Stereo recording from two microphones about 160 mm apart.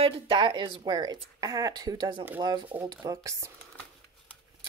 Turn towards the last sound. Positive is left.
turn(degrees=-20)  # may be behind; listen again after turning